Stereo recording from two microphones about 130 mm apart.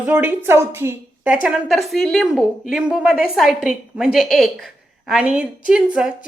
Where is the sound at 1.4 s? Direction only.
5° right (ahead or behind).